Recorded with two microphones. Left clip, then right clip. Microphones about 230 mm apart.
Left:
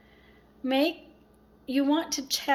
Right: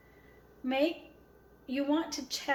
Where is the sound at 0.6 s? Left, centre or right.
Left.